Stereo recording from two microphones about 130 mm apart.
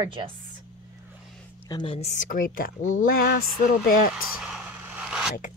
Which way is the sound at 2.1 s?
85° left.